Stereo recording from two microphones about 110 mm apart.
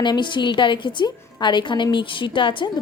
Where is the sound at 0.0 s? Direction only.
45° left (ahead or behind).